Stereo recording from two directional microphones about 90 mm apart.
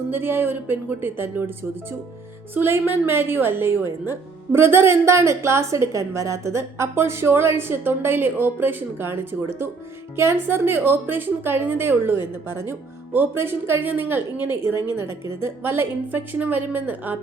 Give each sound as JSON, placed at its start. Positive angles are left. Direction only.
{"t": 0.1, "sound": "a woman's voice", "side_deg": -25}
{"t": 2.6, "sound": "a woman's voice", "side_deg": -25}